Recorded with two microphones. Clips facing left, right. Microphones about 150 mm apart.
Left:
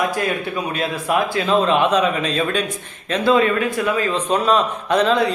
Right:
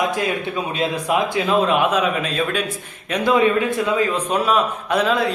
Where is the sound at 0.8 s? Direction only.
15° right (ahead or behind).